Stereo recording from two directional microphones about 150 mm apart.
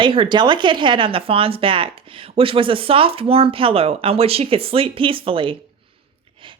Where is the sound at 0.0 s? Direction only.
35° right (ahead or behind).